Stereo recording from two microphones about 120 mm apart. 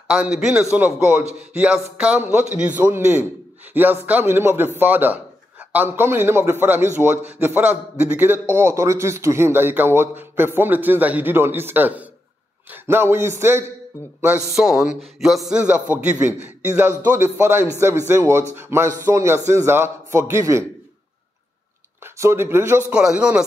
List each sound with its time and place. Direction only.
0.1 s a man's voice: 5° right (ahead or behind)
15.0 s a man's voice: centre (ahead or behind); by 20.6 s 25° right (ahead or behind)
22.0 s a man's voice: 20° right (ahead or behind)
22.9 s a man's voice: 10° right (ahead or behind)